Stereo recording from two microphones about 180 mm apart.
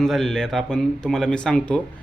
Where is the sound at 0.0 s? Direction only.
Centre (ahead or behind).